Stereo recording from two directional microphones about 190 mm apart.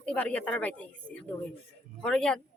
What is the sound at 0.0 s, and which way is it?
A woman's voice, 5° left (ahead or behind).